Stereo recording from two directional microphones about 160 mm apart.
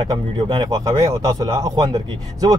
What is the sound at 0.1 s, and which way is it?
Speech, 30° right (ahead or behind).